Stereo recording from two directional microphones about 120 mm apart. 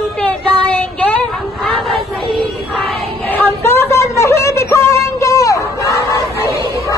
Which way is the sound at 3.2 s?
20° left (ahead or behind).